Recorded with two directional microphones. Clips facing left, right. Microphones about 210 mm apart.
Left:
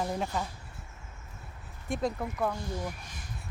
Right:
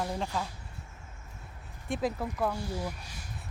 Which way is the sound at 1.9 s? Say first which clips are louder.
Even; 5° right (ahead or behind).